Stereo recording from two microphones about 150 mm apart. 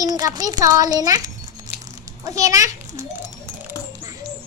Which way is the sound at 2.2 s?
20° right (ahead or behind).